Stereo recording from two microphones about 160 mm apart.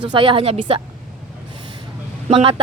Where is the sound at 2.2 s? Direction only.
35° right (ahead or behind).